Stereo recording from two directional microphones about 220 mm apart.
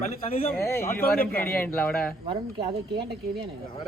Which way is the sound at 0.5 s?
10° left (ahead or behind).